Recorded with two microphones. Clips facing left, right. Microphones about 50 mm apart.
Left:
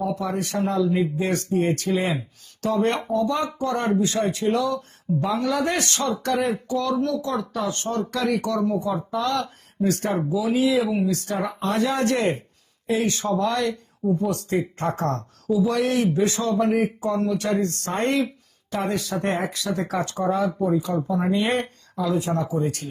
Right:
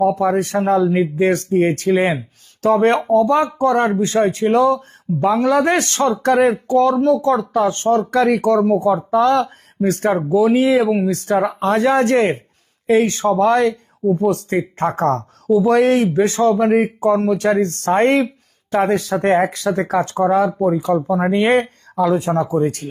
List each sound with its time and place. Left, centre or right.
0.1 s speech: right